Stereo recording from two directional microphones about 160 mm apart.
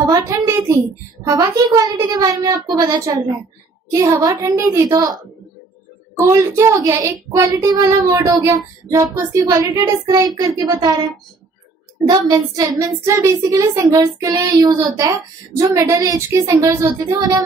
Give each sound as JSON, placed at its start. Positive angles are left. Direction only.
{"t": 0.1, "sound": "a sound", "side_deg": -20}
{"t": 1.2, "sound": "a woman's voice", "side_deg": -25}
{"t": 12.1, "sound": "a woman's voice", "side_deg": -25}